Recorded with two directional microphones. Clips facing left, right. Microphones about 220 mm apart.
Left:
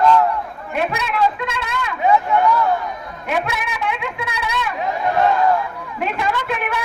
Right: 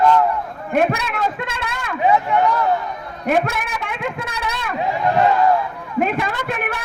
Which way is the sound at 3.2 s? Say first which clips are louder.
Right 4 dB; 50° right (ahead or behind).